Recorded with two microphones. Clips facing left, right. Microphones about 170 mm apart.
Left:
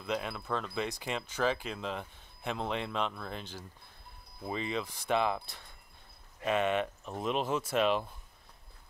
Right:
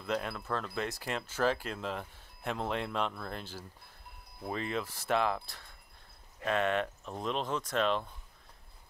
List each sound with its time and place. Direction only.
0.0 s speech: 5° left (ahead or behind)